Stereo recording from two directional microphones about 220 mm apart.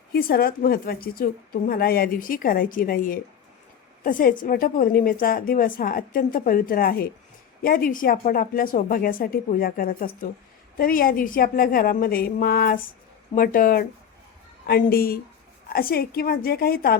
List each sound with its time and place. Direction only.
0.1 s a woman's voice: 45° left (ahead or behind)